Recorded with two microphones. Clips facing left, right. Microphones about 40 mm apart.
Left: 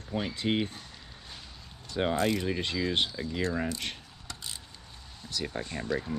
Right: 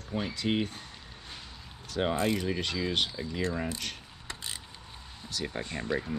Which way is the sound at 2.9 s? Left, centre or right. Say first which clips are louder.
Left 1 dB; left.